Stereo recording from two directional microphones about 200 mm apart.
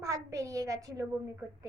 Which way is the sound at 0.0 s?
15° right (ahead or behind).